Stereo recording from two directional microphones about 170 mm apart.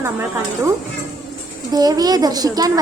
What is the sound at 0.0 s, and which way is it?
Speech, 15° right (ahead or behind).